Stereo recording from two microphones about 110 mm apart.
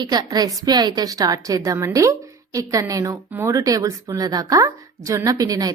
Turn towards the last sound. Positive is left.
turn(degrees=-35)  # may be behind; listen again after turning